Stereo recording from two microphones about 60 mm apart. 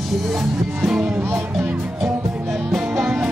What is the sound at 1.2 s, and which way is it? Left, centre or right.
Speech, right.